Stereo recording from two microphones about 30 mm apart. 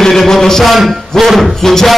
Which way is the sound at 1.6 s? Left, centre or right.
Centre.